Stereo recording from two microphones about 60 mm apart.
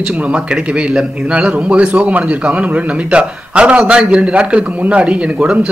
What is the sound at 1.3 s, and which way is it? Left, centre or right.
A man's voice, centre.